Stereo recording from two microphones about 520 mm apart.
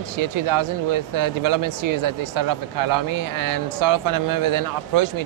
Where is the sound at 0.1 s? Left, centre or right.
Right.